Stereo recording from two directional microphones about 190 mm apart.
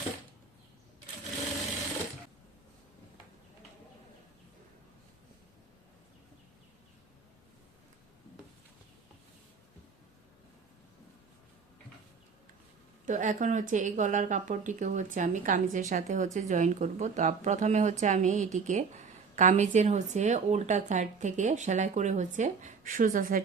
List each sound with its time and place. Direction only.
13.1 s speech: 40° right (ahead or behind)